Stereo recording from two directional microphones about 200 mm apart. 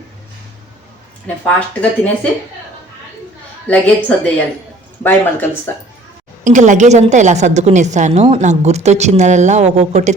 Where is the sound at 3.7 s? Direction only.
5° left (ahead or behind).